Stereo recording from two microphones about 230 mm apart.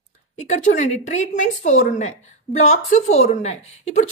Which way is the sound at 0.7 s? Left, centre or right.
Left.